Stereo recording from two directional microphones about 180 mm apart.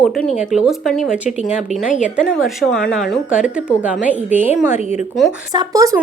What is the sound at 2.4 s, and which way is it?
A woman's voice, centre (ahead or behind).